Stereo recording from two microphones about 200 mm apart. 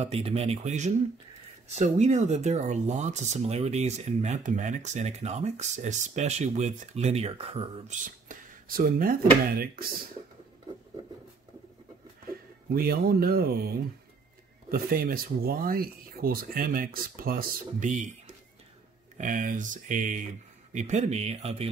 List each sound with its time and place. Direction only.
0.0 s speech: 30° right (ahead or behind)
8.0 s speech: 45° right (ahead or behind)
12.7 s speech: 50° right (ahead or behind)
19.1 s speech: 40° right (ahead or behind)